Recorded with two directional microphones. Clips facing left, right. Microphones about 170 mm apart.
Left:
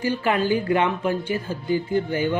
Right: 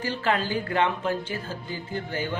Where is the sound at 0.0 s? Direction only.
15° left (ahead or behind).